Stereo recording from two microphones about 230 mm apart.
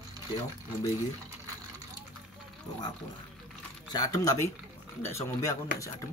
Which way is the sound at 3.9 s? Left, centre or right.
Centre.